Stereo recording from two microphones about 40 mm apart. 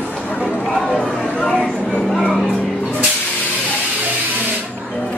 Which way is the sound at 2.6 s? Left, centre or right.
Centre.